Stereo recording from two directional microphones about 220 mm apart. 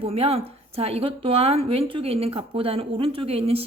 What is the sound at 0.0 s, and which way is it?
A woman's voice, 25° right (ahead or behind).